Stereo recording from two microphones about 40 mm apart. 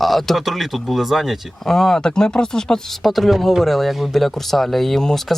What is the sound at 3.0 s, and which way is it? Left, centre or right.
Speech, centre.